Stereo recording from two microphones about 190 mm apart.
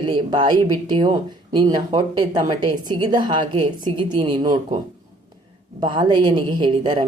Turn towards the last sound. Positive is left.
turn(degrees=-25)  # may be behind; listen again after turning